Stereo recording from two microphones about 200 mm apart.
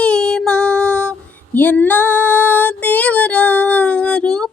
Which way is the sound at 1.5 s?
10° left (ahead or behind).